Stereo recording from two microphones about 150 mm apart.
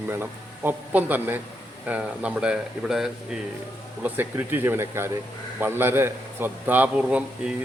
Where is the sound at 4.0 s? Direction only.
15° right (ahead or behind).